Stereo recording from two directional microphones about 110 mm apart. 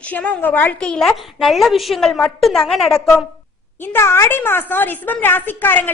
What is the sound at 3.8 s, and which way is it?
A woman's voice, 20° left (ahead or behind).